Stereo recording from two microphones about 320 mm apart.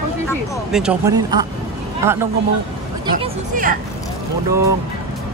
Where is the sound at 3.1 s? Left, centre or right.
Right.